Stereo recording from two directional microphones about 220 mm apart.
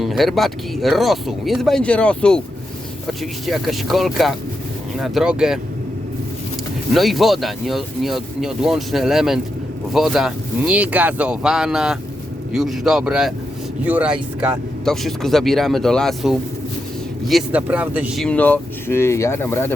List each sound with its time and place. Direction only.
0.0 s speech: centre (ahead or behind)
3.4 s speech: centre (ahead or behind)
6.9 s speech: centre (ahead or behind)